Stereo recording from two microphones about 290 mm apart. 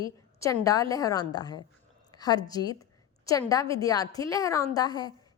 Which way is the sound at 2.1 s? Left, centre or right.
Centre.